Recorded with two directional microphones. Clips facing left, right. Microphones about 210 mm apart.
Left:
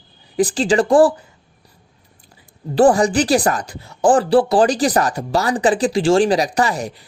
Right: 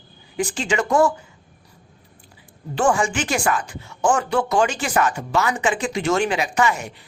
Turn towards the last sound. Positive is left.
turn(degrees=35)  # may be behind; listen again after turning